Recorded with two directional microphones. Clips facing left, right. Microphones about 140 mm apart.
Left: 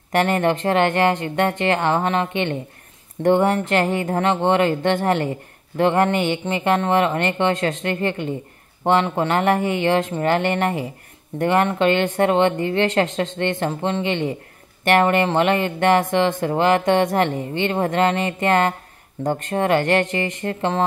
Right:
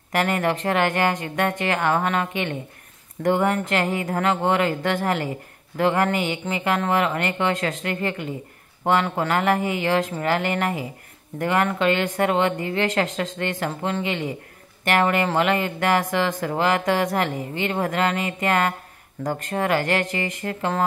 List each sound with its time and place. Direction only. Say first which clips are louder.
0.1 s speech: left 4 dB; 30° left (ahead or behind)